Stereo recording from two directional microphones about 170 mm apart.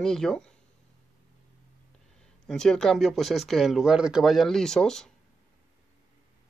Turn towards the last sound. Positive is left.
turn(degrees=5)  # may be behind; listen again after turning